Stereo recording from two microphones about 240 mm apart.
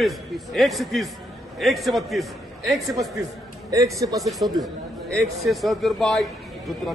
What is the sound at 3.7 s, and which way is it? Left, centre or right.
Speech, centre.